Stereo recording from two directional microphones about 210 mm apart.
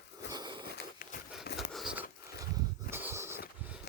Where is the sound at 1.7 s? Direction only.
5° right (ahead or behind).